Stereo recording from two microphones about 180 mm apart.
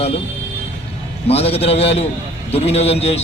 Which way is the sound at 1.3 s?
35° left (ahead or behind).